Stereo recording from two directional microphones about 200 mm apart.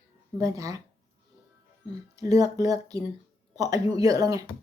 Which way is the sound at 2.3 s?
20° right (ahead or behind).